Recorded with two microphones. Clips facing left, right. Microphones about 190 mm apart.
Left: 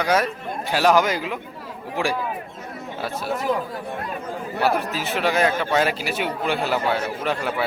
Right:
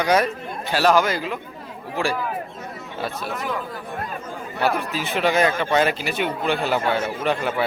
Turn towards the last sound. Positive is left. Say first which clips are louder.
# right 2 dB
turn(degrees=0)  # may be behind; listen again after turning